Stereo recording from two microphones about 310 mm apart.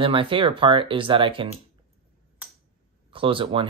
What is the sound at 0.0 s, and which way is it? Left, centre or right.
Speech, centre.